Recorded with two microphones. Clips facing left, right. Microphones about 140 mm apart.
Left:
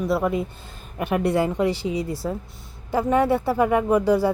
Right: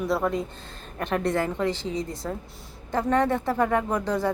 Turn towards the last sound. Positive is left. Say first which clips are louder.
# left 7 dB
turn(degrees=10)  # may be behind; listen again after turning